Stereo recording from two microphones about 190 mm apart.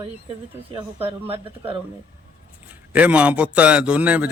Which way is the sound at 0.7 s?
30° right (ahead or behind).